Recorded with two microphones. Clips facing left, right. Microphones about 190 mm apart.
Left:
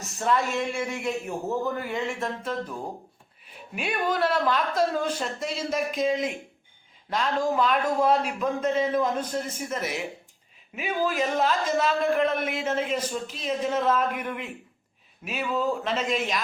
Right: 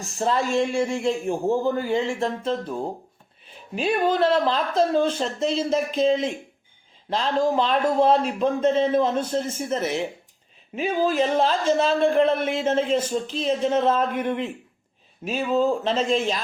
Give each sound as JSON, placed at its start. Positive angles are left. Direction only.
{"t": 0.0, "sound": "a man's voice", "side_deg": -30}